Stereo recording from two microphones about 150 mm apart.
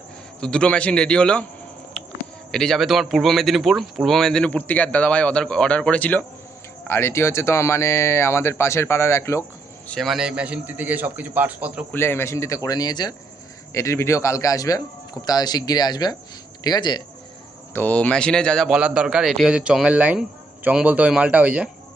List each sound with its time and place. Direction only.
0.3 s speech: 5° left (ahead or behind)
2.5 s speech: 5° left (ahead or behind)
9.9 s a man's voice: centre (ahead or behind)
11.9 s speech: 15° left (ahead or behind)
17.7 s a man's voice: 10° left (ahead or behind); by 21.7 s 10° right (ahead or behind)